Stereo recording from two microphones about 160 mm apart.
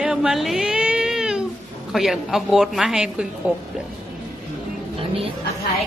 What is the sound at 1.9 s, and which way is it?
A woman's voice, centre (ahead or behind).